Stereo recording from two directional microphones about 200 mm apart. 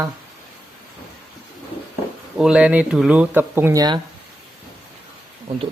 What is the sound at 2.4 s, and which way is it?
Speech, 5° right (ahead or behind).